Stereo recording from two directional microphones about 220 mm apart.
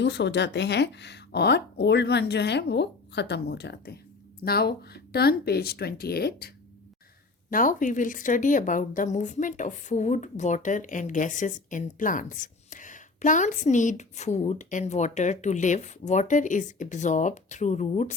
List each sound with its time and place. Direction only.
0.0 s a woman's voice: 50° left (ahead or behind)
7.5 s a woman's voice: 35° left (ahead or behind)